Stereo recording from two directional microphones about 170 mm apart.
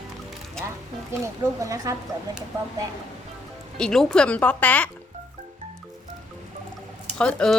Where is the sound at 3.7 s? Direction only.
5° left (ahead or behind).